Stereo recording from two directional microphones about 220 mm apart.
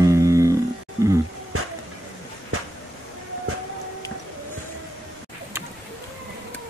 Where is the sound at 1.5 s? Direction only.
80° right.